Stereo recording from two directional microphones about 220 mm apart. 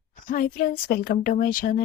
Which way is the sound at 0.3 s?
40° left (ahead or behind).